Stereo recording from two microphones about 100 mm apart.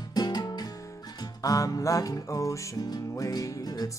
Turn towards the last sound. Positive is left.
turn(degrees=40)  # may be behind; listen again after turning